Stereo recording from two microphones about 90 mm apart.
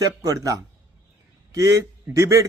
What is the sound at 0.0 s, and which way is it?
Speech, 40° right (ahead or behind).